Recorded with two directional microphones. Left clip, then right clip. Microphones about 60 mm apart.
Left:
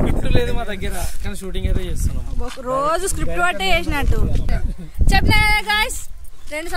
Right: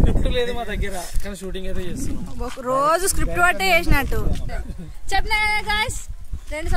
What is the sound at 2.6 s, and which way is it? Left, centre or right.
Speech, right.